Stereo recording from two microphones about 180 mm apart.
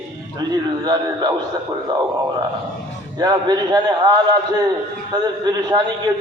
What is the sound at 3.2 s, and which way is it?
Speech, 20° right (ahead or behind).